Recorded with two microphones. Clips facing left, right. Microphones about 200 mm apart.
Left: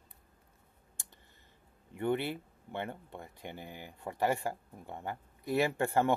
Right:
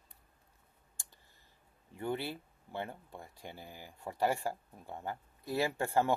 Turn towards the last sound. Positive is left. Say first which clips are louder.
# left 2 dB
turn(degrees=15)  # may be behind; listen again after turning